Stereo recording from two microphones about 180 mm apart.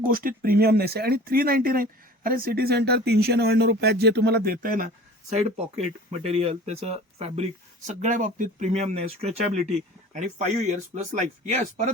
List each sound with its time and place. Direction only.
0.0 s speech: 50° right (ahead or behind)
5.3 s speech: 35° right (ahead or behind)
7.9 s speech: 45° right (ahead or behind)